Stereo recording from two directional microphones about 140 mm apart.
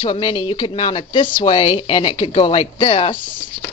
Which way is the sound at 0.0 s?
35° left (ahead or behind).